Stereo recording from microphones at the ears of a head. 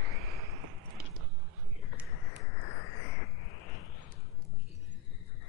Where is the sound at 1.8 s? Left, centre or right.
Left.